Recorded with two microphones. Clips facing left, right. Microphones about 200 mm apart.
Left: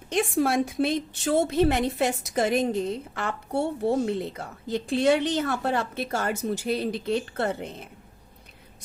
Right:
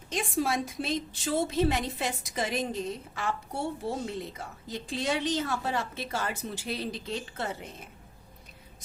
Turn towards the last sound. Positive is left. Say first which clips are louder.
# left 7 dB
turn(degrees=60)  # may be behind; listen again after turning